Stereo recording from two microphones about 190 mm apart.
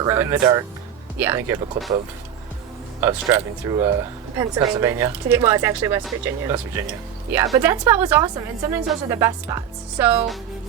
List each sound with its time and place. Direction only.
0.0 s speech: 15° right (ahead or behind)
3.0 s speech: 10° right (ahead or behind)